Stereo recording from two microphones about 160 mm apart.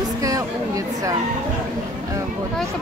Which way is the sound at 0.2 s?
20° right (ahead or behind).